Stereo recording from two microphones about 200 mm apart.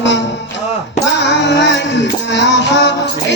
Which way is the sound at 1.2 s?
60° left (ahead or behind).